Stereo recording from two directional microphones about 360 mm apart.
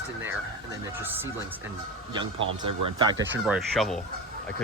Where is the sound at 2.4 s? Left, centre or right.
Right.